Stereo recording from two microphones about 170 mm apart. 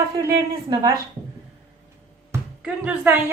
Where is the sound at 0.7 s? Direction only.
20° right (ahead or behind).